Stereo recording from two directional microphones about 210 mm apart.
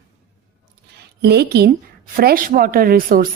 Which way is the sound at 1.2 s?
50° right (ahead or behind).